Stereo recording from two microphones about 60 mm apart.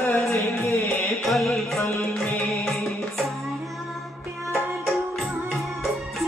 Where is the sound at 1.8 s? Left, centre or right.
Left.